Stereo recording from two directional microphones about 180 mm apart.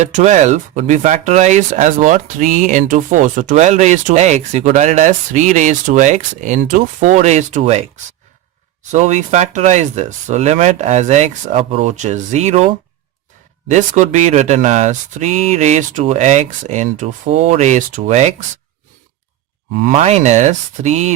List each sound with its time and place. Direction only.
0.1 s speech: 40° right (ahead or behind)
8.9 s speech: 40° right (ahead or behind)
19.7 s speech: 45° right (ahead or behind)